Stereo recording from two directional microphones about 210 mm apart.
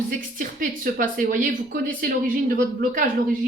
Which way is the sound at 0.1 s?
40° right (ahead or behind).